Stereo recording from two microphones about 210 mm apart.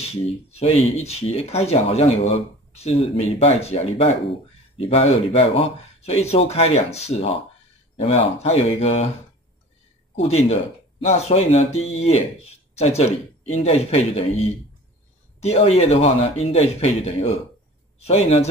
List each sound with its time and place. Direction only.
0.5 s speech: 30° left (ahead or behind)
10.1 s speech: 30° left (ahead or behind)